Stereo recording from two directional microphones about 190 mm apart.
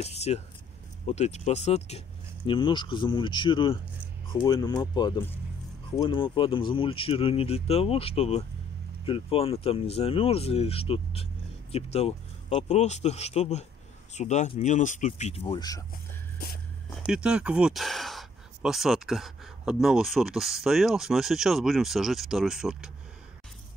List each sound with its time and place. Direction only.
0.0 s speech: 35° left (ahead or behind)
16.9 s speech: 5° right (ahead or behind)